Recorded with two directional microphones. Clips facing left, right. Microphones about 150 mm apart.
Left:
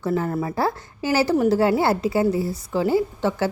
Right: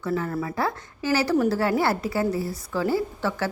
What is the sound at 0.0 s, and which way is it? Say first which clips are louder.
A woman's voice: left 3 dB; 30° left (ahead or behind).